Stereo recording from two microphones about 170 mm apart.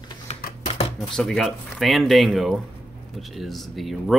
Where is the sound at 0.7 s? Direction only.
40° left (ahead or behind).